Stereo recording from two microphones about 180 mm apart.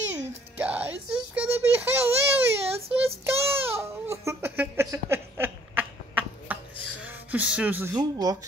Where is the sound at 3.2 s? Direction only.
15° right (ahead or behind).